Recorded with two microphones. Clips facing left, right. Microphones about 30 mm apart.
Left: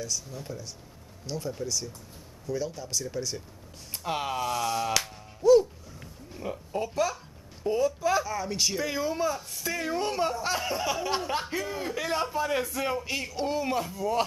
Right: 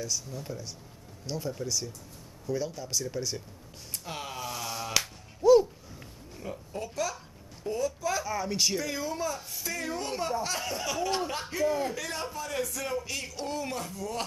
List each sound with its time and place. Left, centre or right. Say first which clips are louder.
0.0 s speech: even; centre
3.9 s speech: left 8 dB; centre
4.4 s speech: left 7 dB; centre
6.4 s speech: left 5 dB; centre
8.3 s speech: even; centre
8.8 s speech: left 4 dB; centre